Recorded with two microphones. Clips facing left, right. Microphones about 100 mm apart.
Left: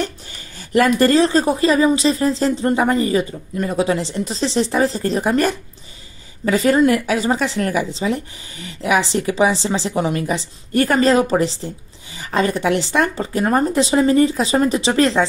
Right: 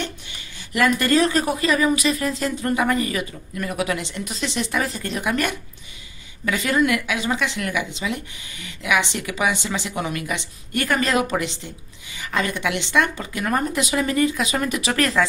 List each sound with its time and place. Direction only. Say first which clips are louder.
0.0 s speech: left 6 dB; 40° left (ahead or behind)